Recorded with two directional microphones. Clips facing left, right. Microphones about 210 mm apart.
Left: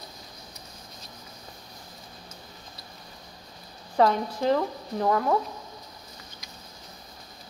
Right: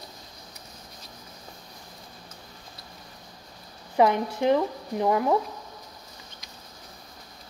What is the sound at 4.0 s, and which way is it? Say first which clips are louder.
A woman's voice: right 1 dB; 15° right (ahead or behind).